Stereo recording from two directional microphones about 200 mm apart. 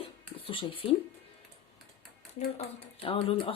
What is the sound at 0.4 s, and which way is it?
Speech, 25° left (ahead or behind).